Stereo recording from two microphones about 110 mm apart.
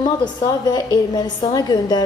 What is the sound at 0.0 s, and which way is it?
A woman's voice, 40° left (ahead or behind).